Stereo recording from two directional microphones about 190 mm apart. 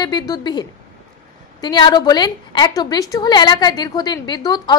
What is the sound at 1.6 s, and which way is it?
A woman's voice, 25° left (ahead or behind).